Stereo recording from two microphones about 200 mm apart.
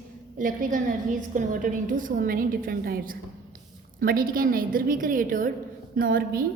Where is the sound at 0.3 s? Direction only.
40° right (ahead or behind).